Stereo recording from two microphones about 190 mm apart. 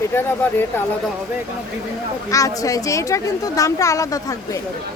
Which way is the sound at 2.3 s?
15° left (ahead or behind).